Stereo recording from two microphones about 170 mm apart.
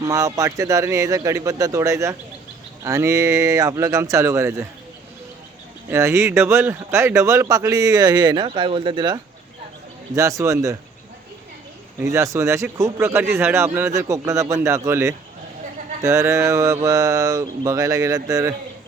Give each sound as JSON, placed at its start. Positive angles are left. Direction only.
{"t": 0.0, "sound": "a man's voice", "side_deg": -20}
{"t": 5.9, "sound": "a man's voice", "side_deg": -15}
{"t": 11.9, "sound": "a man's voice", "side_deg": -15}